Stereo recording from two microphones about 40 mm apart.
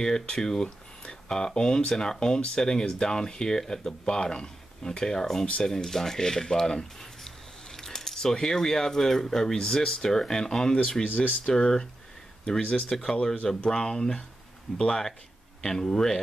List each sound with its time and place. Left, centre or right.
0.0 s speech: centre
12.6 s speech: left
13.0 s speech: centre